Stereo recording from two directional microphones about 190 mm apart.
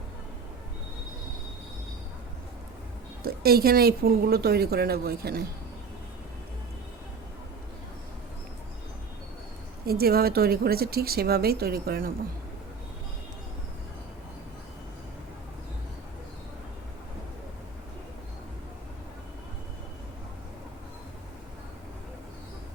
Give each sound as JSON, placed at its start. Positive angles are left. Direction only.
{"t": 3.2, "sound": "speech", "side_deg": -55}
{"t": 9.8, "sound": "speech", "side_deg": -55}